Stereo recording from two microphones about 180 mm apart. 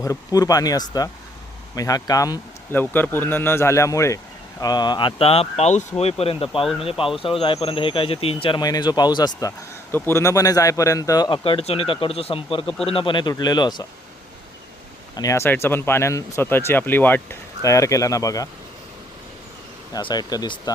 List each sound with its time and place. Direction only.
0.0 s a man's voice: 20° left (ahead or behind)
15.1 s speech: 20° left (ahead or behind)
19.9 s a man's voice: 25° left (ahead or behind)